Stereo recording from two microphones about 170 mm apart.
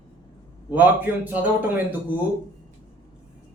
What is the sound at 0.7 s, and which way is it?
A man's voice, 10° right (ahead or behind).